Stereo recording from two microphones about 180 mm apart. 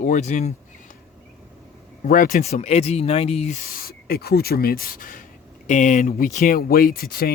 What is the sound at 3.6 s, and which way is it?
Speech, 55° left (ahead or behind).